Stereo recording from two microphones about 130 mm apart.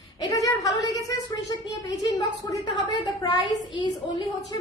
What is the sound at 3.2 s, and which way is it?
Speech, 30° left (ahead or behind).